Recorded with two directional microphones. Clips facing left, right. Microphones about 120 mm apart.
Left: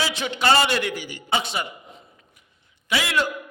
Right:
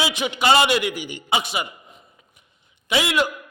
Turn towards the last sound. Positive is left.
turn(degrees=-20)  # may be behind; listen again after turning